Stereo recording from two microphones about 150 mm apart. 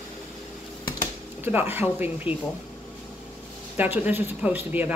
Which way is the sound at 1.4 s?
15° right (ahead or behind).